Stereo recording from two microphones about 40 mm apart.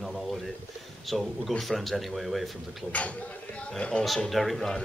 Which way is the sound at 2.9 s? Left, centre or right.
Left.